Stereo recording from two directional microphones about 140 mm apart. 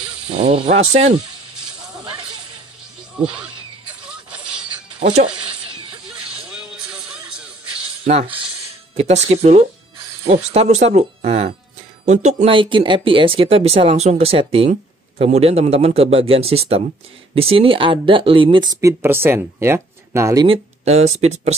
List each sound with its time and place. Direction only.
0.4 s speech: 45° right (ahead or behind)
4.6 s music: 50° right (ahead or behind)
6.0 s music: 5° right (ahead or behind)
8.0 s speech: 50° right (ahead or behind)
12.5 s speech: 35° right (ahead or behind); by 20.4 s 20° right (ahead or behind)
20.4 s speech: 50° right (ahead or behind)